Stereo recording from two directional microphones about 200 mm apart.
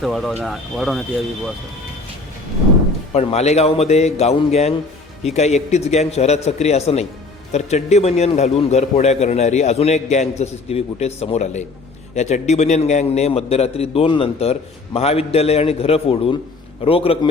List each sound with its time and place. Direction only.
0.0 s speech: centre (ahead or behind)
3.1 s a man's voice: 30° left (ahead or behind)